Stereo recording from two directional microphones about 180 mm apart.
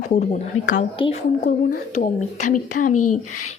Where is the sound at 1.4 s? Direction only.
40° left (ahead or behind).